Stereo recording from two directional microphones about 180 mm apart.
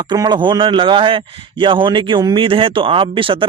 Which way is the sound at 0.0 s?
25° right (ahead or behind).